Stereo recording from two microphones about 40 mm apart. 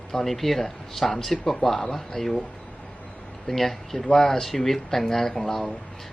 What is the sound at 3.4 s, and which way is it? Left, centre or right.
Speech, centre.